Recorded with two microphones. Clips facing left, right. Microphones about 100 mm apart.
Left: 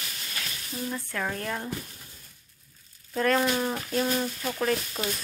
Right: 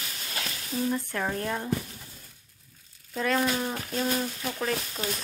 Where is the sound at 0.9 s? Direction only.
15° right (ahead or behind).